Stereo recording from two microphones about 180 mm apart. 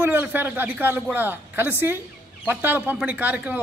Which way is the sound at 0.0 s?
10° right (ahead or behind).